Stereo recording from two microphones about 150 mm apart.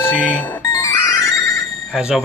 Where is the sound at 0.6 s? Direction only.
25° left (ahead or behind).